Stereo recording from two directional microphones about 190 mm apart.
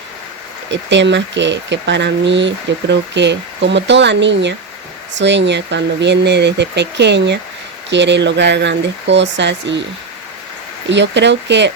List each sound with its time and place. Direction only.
0.7 s speech: 70° right (ahead or behind)
10.8 s speech: 70° right (ahead or behind)